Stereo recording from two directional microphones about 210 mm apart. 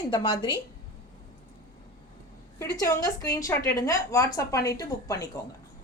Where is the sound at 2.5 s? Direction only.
15° left (ahead or behind).